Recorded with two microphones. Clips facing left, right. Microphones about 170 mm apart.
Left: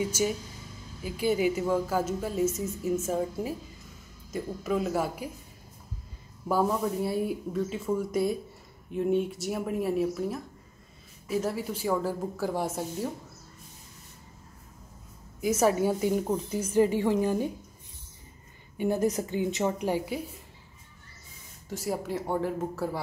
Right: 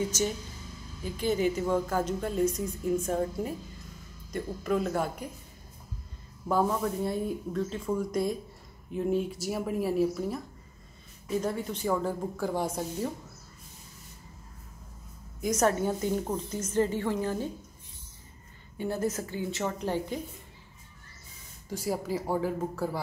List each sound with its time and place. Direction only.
0.0 s a woman's voice: 10° left (ahead or behind)
6.5 s a woman's voice: 5° left (ahead or behind)
15.4 s a woman's voice: 5° left (ahead or behind)
18.8 s a woman's voice: 15° left (ahead or behind)
21.6 s a woman's voice: centre (ahead or behind)